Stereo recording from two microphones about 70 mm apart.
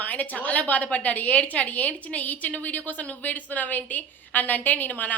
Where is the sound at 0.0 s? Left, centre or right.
Left.